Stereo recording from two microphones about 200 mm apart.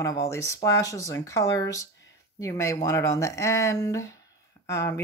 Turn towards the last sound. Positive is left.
turn(degrees=15)  # may be behind; listen again after turning